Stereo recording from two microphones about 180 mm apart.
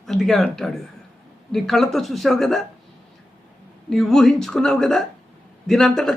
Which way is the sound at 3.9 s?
Centre (ahead or behind).